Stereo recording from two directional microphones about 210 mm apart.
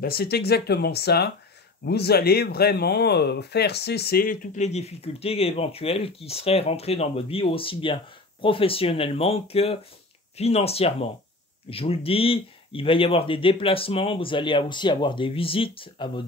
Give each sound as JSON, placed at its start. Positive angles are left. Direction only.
{"t": 0.0, "sound": "speech", "side_deg": 45}